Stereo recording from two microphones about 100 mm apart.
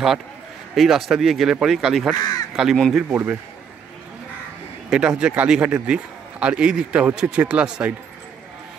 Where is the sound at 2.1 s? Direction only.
40° left (ahead or behind).